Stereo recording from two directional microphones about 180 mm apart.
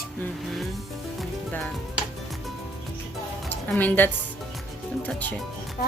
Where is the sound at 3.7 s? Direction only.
10° left (ahead or behind).